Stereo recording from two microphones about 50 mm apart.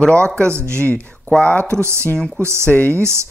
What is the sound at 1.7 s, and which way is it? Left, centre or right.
Speech, right.